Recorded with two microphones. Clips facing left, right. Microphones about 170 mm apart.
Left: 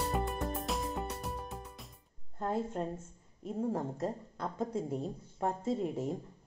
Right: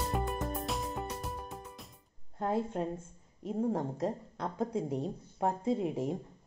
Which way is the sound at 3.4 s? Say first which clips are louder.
Right 2 dB; centre (ahead or behind).